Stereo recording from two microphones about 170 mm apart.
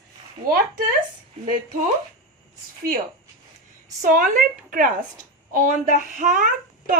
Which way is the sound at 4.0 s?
50° right (ahead or behind).